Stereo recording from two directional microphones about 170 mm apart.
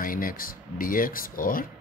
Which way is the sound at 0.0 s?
55° left (ahead or behind).